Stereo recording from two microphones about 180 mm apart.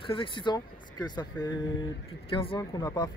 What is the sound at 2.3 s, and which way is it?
Speech, 30° left (ahead or behind).